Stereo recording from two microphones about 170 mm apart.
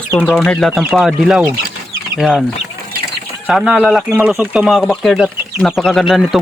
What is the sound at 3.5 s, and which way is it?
Speech, centre (ahead or behind).